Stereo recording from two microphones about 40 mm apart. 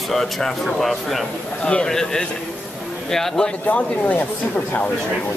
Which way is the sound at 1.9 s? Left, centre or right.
Centre.